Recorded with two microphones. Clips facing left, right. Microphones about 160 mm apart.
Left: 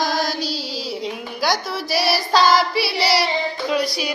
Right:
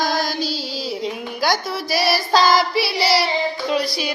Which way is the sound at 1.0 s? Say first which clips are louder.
Right 1 dB; centre (ahead or behind).